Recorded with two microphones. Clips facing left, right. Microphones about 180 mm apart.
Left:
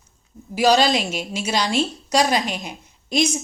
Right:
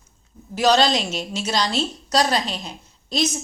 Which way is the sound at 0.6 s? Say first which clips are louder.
Left 1 dB; 10° left (ahead or behind).